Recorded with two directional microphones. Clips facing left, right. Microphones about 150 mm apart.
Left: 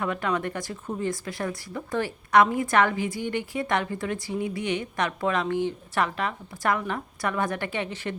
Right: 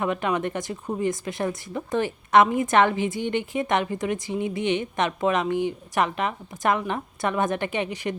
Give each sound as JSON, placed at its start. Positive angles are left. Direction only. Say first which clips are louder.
{"t": 0.0, "sound": "speech", "louder": "right 2 dB", "side_deg": -20}